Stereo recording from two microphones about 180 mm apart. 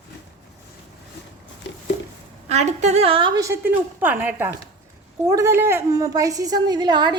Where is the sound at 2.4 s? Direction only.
40° right (ahead or behind).